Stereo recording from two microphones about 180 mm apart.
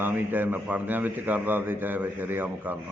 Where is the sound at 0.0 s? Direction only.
10° right (ahead or behind).